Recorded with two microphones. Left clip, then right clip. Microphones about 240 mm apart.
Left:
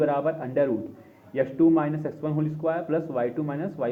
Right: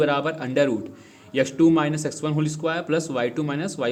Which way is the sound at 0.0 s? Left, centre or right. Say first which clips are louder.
Right 2 dB; right.